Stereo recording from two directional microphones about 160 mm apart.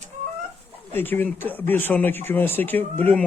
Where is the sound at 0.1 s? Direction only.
55° right (ahead or behind).